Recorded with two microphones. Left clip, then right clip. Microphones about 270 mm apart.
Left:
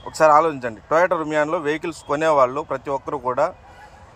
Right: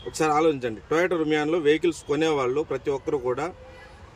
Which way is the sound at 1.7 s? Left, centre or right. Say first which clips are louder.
Right 1 dB; centre.